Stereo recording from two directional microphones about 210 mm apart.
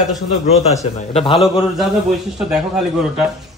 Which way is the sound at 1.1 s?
25° left (ahead or behind).